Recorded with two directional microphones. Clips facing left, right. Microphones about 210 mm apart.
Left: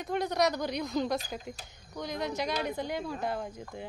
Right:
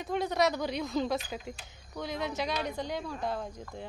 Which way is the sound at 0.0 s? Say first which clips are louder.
Even; centre (ahead or behind).